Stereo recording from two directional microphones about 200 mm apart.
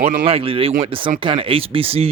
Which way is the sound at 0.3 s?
30° right (ahead or behind).